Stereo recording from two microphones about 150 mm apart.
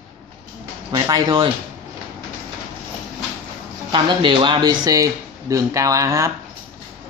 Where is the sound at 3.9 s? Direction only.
30° right (ahead or behind).